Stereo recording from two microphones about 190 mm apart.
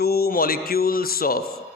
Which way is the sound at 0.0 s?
55° left (ahead or behind).